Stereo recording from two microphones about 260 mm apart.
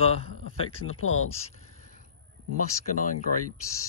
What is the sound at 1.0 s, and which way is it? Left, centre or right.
Speech, left.